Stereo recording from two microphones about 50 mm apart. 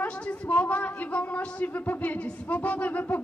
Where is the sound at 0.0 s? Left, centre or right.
Left.